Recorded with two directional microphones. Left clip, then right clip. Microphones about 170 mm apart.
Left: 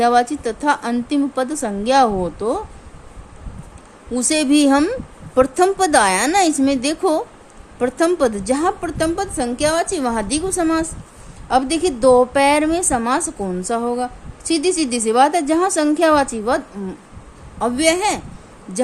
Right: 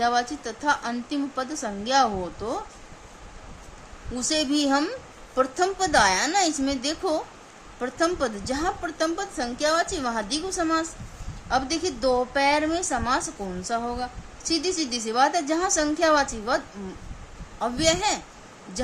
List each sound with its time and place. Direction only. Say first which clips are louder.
0.0 s a woman's voice: left 9 dB; 50° left (ahead or behind)
4.1 s a woman's voice: left 8 dB; 45° left (ahead or behind)
17.6 s a woman's voice: left 6 dB; 50° left (ahead or behind)